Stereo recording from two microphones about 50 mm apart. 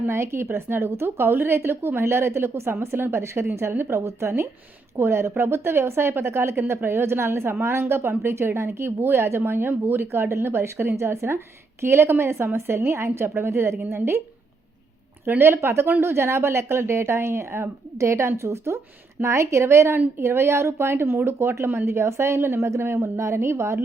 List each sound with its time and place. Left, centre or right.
0.1 s a woman's voice: right
3.6 s a woman's voice: right
15.4 s a woman's voice: right